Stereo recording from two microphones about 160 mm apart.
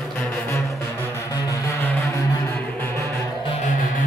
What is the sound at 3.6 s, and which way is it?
Music, 55° left (ahead or behind).